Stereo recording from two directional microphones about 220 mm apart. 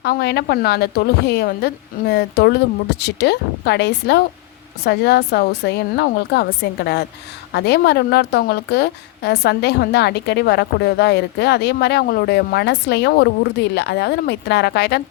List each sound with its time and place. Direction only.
0.0 s a woman's voice: 45° left (ahead or behind)